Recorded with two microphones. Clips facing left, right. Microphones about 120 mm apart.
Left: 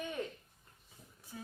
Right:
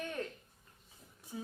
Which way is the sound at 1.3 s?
10° right (ahead or behind).